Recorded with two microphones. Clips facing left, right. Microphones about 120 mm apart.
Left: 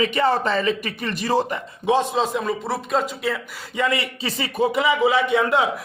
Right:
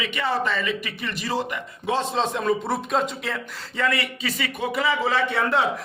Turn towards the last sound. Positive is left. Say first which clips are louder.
# left 3 dB
turn(degrees=15)  # may be behind; listen again after turning